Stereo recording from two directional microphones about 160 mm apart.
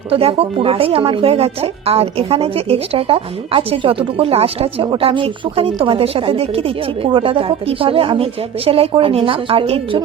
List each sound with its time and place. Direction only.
0.1 s speech: 35° right (ahead or behind)